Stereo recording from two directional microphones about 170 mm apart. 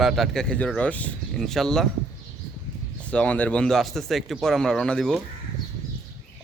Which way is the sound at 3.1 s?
10° left (ahead or behind).